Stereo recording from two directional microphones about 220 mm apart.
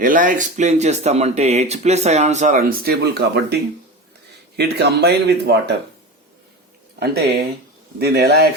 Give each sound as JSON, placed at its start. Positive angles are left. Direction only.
{"t": 0.0, "sound": "speech", "side_deg": -35}
{"t": 7.0, "sound": "speech", "side_deg": -45}